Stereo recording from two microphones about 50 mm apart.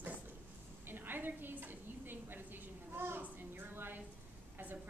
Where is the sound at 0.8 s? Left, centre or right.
Right.